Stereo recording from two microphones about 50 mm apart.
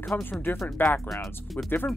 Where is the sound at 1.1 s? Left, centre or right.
Centre.